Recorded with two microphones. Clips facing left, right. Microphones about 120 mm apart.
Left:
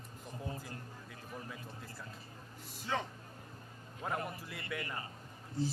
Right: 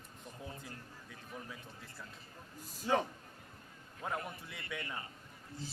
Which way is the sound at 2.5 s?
40° right (ahead or behind).